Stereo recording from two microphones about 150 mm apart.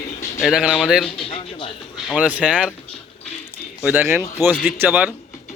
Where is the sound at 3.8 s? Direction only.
15° right (ahead or behind).